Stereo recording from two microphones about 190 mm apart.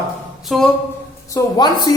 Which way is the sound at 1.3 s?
20° left (ahead or behind).